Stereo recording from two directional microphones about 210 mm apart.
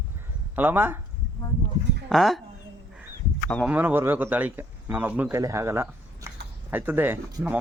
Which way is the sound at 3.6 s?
10° right (ahead or behind).